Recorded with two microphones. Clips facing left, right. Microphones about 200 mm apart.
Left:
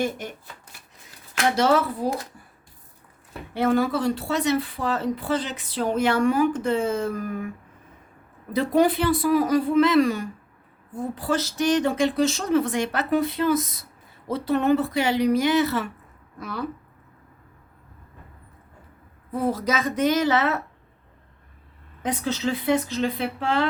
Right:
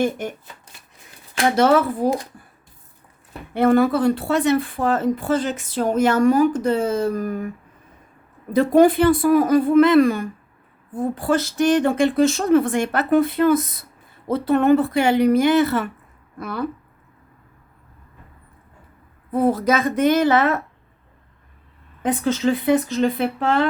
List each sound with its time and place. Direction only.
0.0 s speech: 50° right (ahead or behind)
1.5 s speech: 55° right (ahead or behind)
3.5 s speech: 55° right (ahead or behind); by 7.5 s 40° right (ahead or behind)
8.5 s speech: 50° right (ahead or behind)
19.3 s speech: 55° right (ahead or behind)
22.0 s speech: 50° right (ahead or behind)